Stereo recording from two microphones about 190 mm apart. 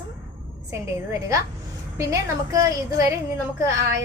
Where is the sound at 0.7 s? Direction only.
15° right (ahead or behind).